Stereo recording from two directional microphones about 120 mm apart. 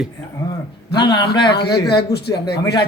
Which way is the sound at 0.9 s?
40° left (ahead or behind).